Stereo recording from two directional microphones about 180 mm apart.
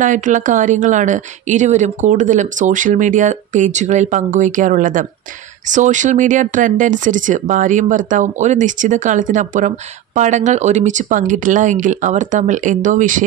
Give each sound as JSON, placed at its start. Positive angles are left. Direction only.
{"t": 0.0, "sound": "speech", "side_deg": -45}